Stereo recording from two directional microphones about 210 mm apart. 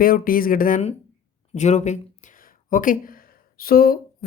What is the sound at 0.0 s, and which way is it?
Speech, 45° left (ahead or behind).